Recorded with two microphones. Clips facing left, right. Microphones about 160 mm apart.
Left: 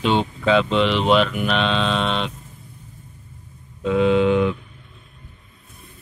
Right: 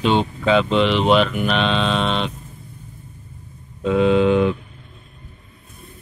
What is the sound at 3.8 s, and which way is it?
Mantra, 35° right (ahead or behind).